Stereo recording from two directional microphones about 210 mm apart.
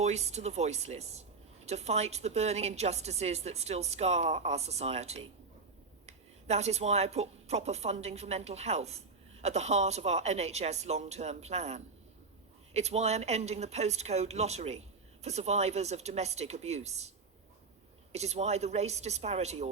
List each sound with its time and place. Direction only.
0.0 s speech: 30° right (ahead or behind)
18.1 s speech: 30° right (ahead or behind)